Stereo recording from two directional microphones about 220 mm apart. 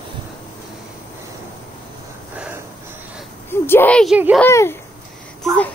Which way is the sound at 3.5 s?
10° left (ahead or behind).